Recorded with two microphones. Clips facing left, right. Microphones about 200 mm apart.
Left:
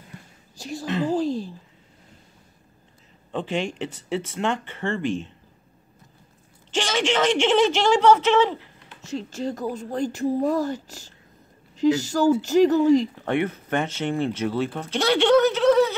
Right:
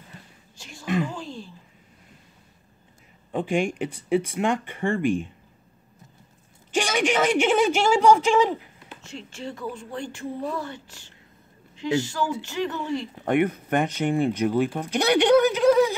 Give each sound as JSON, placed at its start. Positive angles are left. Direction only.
{"t": 0.6, "sound": "speech", "side_deg": 40}
{"t": 1.0, "sound": "a sound", "side_deg": 35}
{"t": 3.3, "sound": "speech", "side_deg": -10}
{"t": 6.7, "sound": "speech", "side_deg": -10}
{"t": 9.0, "sound": "speech", "side_deg": 40}
{"t": 13.2, "sound": "speech", "side_deg": -15}